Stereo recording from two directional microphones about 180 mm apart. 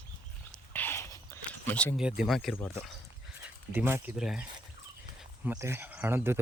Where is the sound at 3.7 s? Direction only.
10° right (ahead or behind).